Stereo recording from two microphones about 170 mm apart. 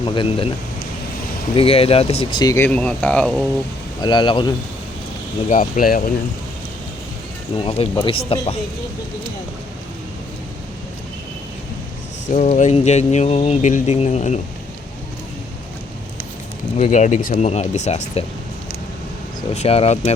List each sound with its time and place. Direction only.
0.0 s speech: 30° left (ahead or behind)
1.5 s speech: 35° left (ahead or behind)
2.4 s speech: 20° left (ahead or behind)
2.6 s speech: 5° left (ahead or behind)
4.0 s speech: 25° left (ahead or behind)
5.5 s speech: 50° left (ahead or behind)
7.5 s speech: 35° left (ahead or behind)
12.3 s speech: 45° left (ahead or behind)
16.7 s speech: 40° left (ahead or behind)
17.3 s speech: 40° left (ahead or behind)
19.5 s speech: 35° left (ahead or behind)